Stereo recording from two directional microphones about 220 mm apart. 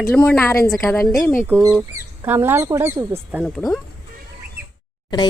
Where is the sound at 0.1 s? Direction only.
10° left (ahead or behind).